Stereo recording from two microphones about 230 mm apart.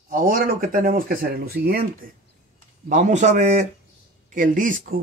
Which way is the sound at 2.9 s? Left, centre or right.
Right.